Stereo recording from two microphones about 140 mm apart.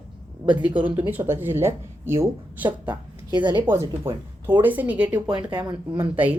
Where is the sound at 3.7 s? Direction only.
15° right (ahead or behind).